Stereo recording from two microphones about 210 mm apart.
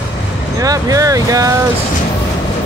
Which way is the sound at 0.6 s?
15° right (ahead or behind).